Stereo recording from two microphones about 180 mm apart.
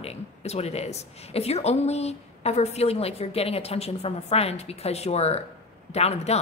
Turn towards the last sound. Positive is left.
turn(degrees=35)  # may be behind; listen again after turning